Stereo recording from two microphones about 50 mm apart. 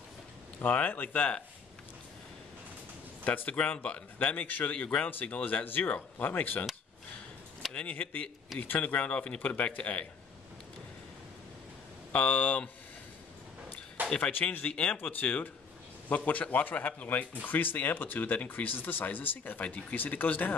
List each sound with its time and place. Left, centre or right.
0.6 s speech: left
3.4 s speech: left
7.9 s a man's voice: left
12.1 s speech: left
14.1 s speech: left
15.0 s speech: left